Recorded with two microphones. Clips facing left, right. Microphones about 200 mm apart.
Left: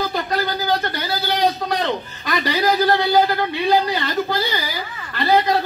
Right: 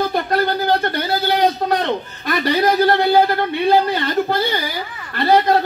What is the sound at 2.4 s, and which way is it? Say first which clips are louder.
Speech: right 3 dB; 55° right (ahead or behind).